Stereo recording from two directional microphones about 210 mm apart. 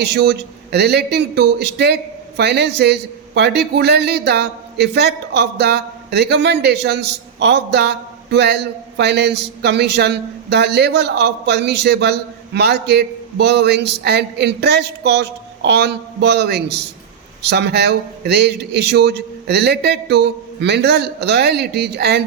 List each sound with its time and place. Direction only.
0.0 s a man's voice: 55° right (ahead or behind)